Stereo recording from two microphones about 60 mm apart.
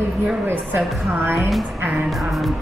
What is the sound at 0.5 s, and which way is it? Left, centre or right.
A woman's voice, right.